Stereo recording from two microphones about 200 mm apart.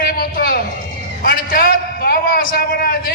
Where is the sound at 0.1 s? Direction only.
50° left (ahead or behind).